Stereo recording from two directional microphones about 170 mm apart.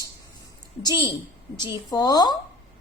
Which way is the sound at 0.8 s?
25° left (ahead or behind).